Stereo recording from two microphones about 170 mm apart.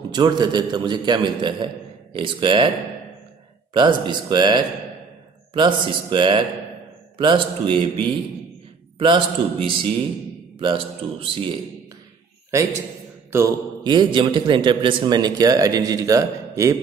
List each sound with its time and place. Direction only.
0.1 s a man's voice: 25° right (ahead or behind)
3.7 s a man's voice: 25° right (ahead or behind)
13.3 s a man's voice: 20° right (ahead or behind)